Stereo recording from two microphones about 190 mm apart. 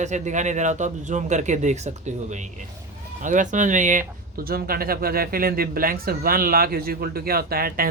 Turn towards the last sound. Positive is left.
turn(degrees=-50)  # may be behind; listen again after turning